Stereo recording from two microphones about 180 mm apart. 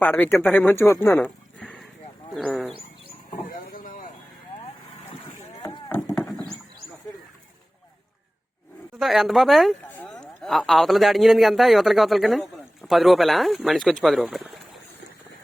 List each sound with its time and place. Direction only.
0.0 s speech: 10° left (ahead or behind)
1.5 s horse: centre (ahead or behind)
2.3 s speech: centre (ahead or behind)
3.3 s vehicle: 50° left (ahead or behind)
9.0 s speech: centre (ahead or behind)